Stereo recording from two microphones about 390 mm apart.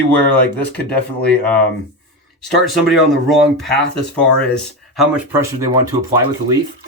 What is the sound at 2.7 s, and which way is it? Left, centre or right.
Speech, centre.